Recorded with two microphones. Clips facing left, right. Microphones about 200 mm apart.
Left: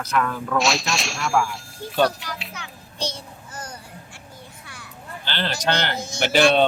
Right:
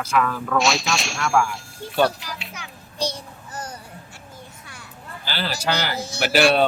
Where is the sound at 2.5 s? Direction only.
15° right (ahead or behind).